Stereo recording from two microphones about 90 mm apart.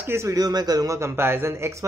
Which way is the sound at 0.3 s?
45° right (ahead or behind).